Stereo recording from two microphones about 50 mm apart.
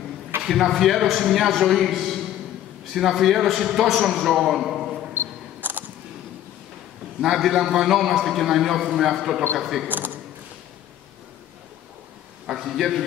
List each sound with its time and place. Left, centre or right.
0.4 s a man's voice: centre
5.6 s single-lens reflex camera: right
7.2 s a man's voice: centre
9.8 s speech: right
12.4 s a man's voice: centre